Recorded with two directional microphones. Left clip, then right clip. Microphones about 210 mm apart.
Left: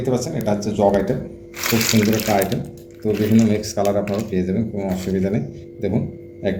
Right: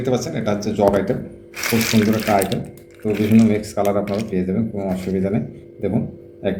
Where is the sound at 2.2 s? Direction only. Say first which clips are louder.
Right 1 dB; 15° right (ahead or behind).